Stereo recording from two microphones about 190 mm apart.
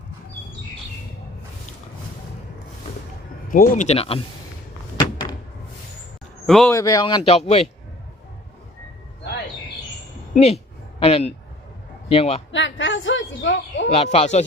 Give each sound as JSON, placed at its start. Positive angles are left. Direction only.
{"t": 3.5, "sound": "speech", "side_deg": 45}
{"t": 6.4, "sound": "a sound", "side_deg": 0}
{"t": 6.7, "sound": "speech", "side_deg": 15}
{"t": 10.3, "sound": "speech", "side_deg": 35}
{"t": 12.5, "sound": "a woman's voice", "side_deg": 75}
{"t": 13.9, "sound": "speech", "side_deg": 30}